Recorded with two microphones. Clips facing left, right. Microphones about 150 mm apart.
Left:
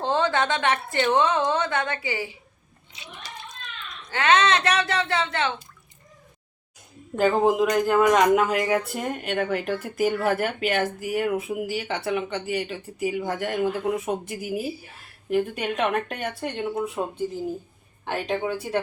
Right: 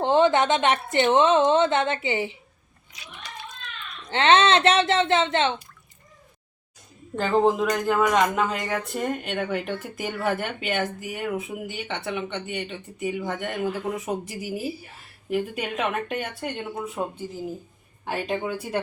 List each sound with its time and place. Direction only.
0.0 s a woman's voice: 20° right (ahead or behind)
2.9 s a child's voice: 25° left (ahead or behind)
4.1 s a woman's voice: 25° right (ahead or behind)
7.2 s speech: 10° left (ahead or behind)